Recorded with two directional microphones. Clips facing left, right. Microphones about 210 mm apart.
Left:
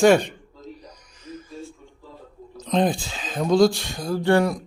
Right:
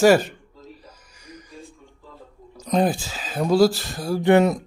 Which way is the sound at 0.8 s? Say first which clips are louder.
Left 5 dB; 10° right (ahead or behind).